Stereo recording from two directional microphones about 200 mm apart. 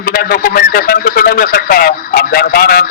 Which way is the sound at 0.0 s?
50° left (ahead or behind).